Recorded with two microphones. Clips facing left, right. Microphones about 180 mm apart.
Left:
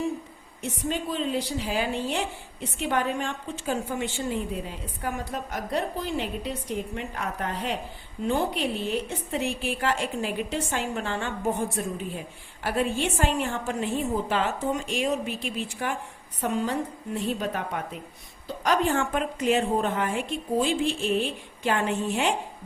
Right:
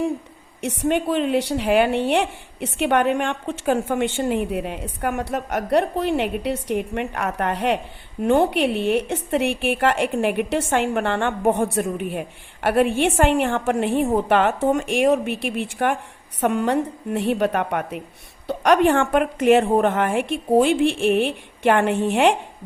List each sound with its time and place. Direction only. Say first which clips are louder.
0.6 s a woman's voice: right 8 dB; 75° right (ahead or behind)
14.7 s a woman's voice: right 9 dB; 55° right (ahead or behind); by 22.4 s 70° right (ahead or behind)